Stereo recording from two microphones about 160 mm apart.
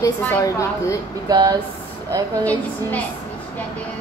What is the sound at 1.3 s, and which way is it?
Speech, 25° right (ahead or behind).